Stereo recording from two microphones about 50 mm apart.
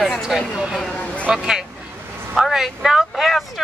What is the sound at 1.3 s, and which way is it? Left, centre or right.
Speech, centre.